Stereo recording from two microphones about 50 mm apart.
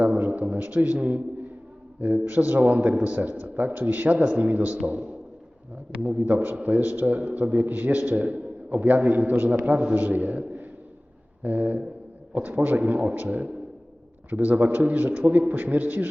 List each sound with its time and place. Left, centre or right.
0.0 s a man's voice: right